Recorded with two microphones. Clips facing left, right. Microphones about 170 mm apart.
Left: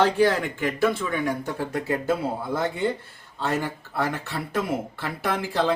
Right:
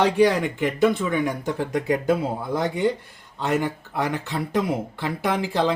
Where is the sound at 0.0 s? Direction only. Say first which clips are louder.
Right 2 dB; 15° right (ahead or behind).